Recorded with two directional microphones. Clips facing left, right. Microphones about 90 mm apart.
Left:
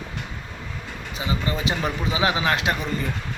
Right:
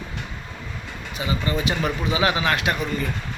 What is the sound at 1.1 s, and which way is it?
Speech, 25° left (ahead or behind).